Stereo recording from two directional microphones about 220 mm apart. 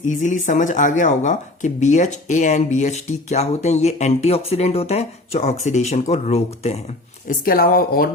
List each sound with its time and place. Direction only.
0.0 s speech: 35° left (ahead or behind)
7.3 s speech: 40° left (ahead or behind)